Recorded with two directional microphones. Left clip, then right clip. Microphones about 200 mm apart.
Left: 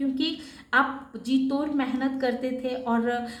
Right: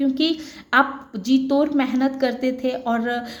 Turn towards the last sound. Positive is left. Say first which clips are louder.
# right 4 dB
turn(degrees=-40)  # may be behind; listen again after turning